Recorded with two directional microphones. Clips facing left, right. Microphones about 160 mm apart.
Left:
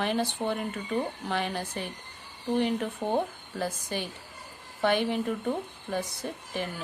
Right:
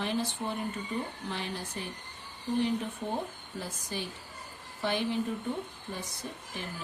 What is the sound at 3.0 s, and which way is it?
Speech, 65° left (ahead or behind).